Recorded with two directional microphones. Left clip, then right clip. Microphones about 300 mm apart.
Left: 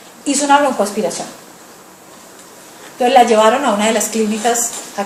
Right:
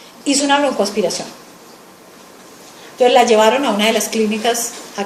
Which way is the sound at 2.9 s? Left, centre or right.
Right.